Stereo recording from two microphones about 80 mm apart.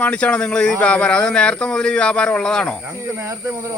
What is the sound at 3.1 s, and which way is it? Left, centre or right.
Speech, right.